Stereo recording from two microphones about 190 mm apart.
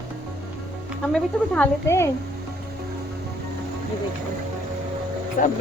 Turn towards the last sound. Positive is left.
turn(degrees=45)  # may be behind; listen again after turning